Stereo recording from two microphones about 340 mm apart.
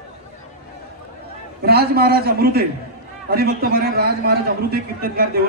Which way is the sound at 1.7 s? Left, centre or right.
Right.